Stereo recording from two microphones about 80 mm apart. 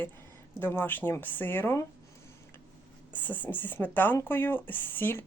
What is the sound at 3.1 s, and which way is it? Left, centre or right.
Speech, left.